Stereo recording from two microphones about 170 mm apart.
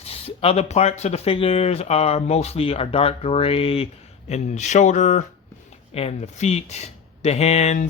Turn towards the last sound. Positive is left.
turn(degrees=40)  # may be behind; listen again after turning